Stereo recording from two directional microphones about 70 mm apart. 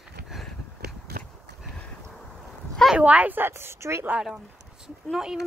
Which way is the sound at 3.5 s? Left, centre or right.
Right.